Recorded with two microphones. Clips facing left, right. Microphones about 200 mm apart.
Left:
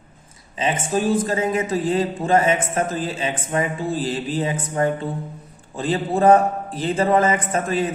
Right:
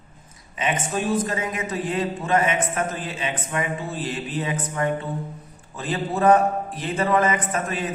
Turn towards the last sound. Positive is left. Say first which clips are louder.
# left 4 dB
turn(degrees=30)  # may be behind; listen again after turning